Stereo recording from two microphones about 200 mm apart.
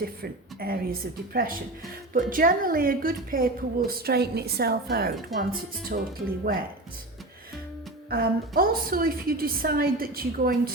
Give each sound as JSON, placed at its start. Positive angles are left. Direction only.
{"t": 0.0, "sound": "a woman's voice", "side_deg": -50}
{"t": 8.1, "sound": "a woman's voice", "side_deg": -50}